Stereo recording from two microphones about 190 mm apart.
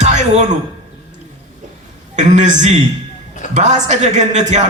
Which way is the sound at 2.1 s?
40° right (ahead or behind).